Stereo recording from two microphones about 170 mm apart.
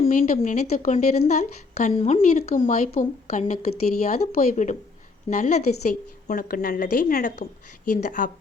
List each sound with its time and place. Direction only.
0.1 s speech: 50° left (ahead or behind)